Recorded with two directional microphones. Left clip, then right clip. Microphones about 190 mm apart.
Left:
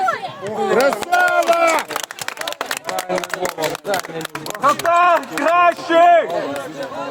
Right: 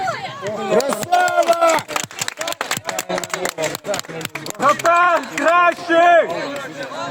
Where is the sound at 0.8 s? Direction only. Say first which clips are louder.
Left 1 dB; 50° right (ahead or behind).